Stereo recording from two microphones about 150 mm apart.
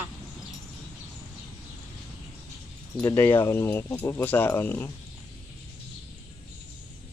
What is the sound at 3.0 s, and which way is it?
Speech, 15° left (ahead or behind).